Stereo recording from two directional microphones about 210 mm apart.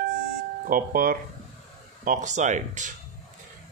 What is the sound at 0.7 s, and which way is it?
A man's voice, 40° right (ahead or behind).